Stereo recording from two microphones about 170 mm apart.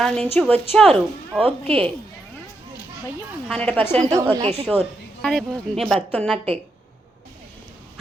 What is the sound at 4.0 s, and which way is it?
Speech, 20° right (ahead or behind).